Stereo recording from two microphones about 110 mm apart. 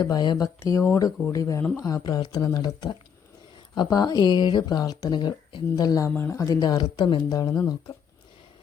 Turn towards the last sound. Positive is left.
turn(degrees=35)  # may be behind; listen again after turning